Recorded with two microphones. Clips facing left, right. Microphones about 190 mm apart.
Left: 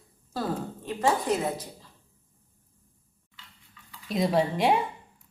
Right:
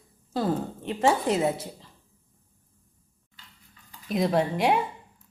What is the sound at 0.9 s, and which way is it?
Speech, 25° right (ahead or behind).